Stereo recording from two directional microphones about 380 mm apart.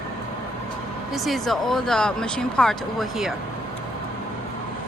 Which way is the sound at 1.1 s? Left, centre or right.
Centre.